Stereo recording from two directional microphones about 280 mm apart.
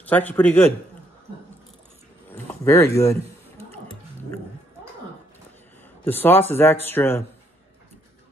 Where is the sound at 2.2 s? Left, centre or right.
Centre.